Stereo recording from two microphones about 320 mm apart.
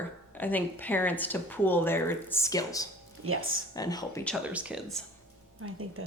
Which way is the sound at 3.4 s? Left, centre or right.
Right.